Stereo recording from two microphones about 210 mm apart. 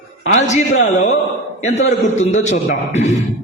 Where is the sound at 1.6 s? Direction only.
30° left (ahead or behind).